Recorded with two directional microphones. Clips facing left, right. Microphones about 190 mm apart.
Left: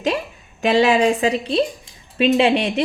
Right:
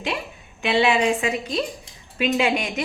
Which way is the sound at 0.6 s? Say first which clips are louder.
Left 4 dB; 40° left (ahead or behind).